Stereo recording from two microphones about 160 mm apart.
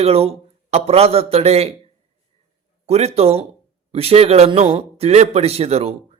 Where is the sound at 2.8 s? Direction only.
40° right (ahead or behind).